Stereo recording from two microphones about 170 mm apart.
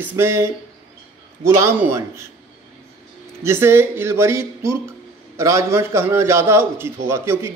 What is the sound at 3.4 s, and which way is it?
A man's voice, 15° right (ahead or behind).